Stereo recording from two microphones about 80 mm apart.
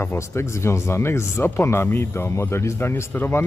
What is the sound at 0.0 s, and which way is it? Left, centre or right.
Speech, left.